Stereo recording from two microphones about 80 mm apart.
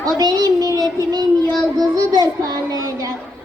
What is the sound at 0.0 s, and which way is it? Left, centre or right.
Speech, right.